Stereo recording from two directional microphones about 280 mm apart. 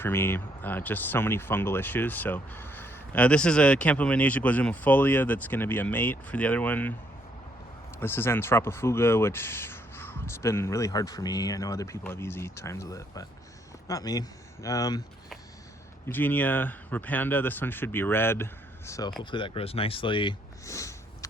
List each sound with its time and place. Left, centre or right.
0.0 s speech: centre
7.9 s speech: centre
16.0 s speech: centre